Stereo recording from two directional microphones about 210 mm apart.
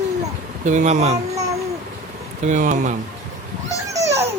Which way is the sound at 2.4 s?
35° right (ahead or behind).